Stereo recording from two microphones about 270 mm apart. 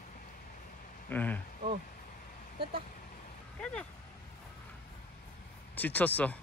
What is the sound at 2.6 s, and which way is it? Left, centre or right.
Speech, centre.